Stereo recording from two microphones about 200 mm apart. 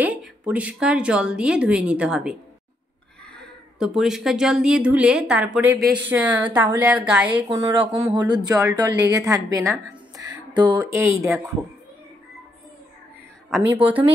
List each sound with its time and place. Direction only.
0.0 s speech: 5° right (ahead or behind)
3.3 s a woman's voice: centre (ahead or behind)
7.5 s a woman's voice: 20° right (ahead or behind)
13.5 s a woman's voice: 5° right (ahead or behind)